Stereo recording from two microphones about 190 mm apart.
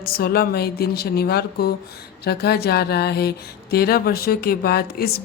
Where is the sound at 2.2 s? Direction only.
55° left (ahead or behind).